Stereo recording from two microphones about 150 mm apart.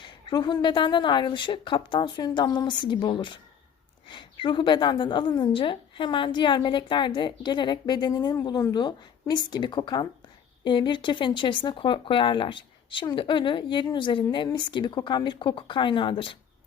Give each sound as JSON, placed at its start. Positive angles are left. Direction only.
{"t": 0.0, "sound": "a woman's voice", "side_deg": 30}